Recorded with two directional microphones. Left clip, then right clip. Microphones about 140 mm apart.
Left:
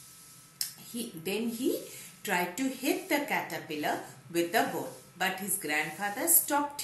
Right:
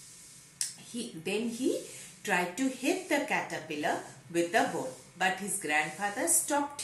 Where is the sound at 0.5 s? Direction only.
5° right (ahead or behind).